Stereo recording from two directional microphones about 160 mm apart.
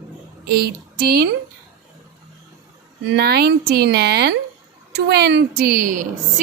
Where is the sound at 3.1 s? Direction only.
80° right.